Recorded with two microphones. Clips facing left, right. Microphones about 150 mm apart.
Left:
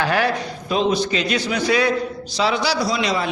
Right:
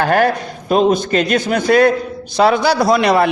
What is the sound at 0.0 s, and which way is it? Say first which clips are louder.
A man's voice: right 6 dB; 50° right (ahead or behind).